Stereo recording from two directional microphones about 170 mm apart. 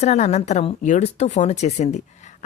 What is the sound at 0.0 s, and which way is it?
A woman's voice, 40° left (ahead or behind).